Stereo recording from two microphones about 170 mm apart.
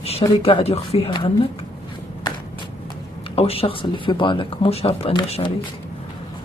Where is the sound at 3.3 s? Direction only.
35° left (ahead or behind).